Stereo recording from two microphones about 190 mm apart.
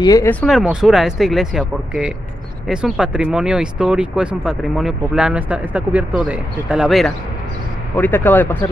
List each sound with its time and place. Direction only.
0.0 s speech: 20° left (ahead or behind)
0.3 s speech: centre (ahead or behind)
7.9 s speech: 10° left (ahead or behind)